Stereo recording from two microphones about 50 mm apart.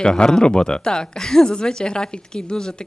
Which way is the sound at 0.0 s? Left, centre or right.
Centre.